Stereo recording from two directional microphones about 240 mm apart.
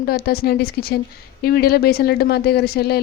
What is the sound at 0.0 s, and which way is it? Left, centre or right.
Speech, left.